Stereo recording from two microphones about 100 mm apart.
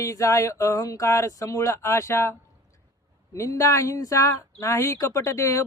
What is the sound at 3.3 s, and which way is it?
Speech, 30° left (ahead or behind).